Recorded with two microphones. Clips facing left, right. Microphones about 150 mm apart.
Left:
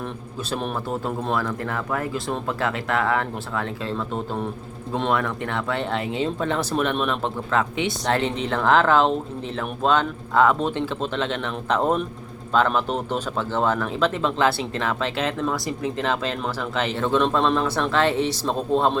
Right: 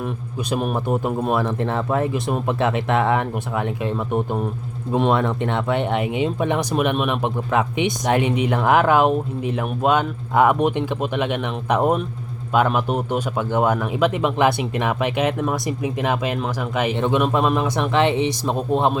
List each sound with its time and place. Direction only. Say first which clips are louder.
0.5 s speech: right 5 dB; 15° right (ahead or behind)